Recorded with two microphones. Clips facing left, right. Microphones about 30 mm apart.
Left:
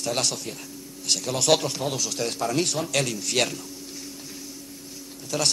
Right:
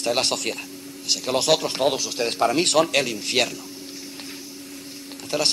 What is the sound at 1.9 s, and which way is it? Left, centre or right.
Speech, right.